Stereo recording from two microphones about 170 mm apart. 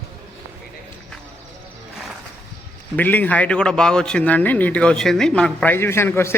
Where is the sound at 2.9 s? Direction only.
10° left (ahead or behind).